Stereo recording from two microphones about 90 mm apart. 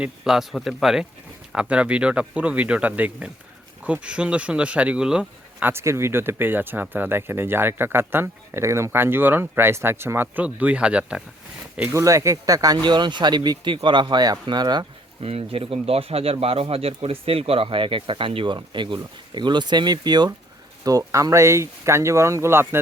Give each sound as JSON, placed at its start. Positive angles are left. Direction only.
{"t": 0.0, "sound": "a man's voice", "side_deg": -5}
{"t": 5.6, "sound": "speech", "side_deg": -30}
{"t": 11.8, "sound": "speech", "side_deg": -30}
{"t": 15.2, "sound": "speech", "side_deg": -90}
{"t": 20.8, "sound": "speech", "side_deg": -40}